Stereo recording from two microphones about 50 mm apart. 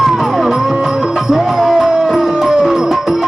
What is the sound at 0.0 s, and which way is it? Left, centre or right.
Music, centre.